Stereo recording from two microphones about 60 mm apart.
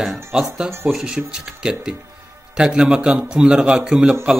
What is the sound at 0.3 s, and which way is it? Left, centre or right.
A man's voice, centre.